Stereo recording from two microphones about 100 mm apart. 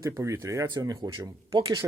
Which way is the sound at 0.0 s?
30° right (ahead or behind).